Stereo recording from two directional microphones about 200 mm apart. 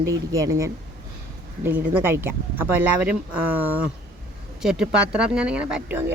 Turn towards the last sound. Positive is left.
turn(degrees=-5)  # may be behind; listen again after turning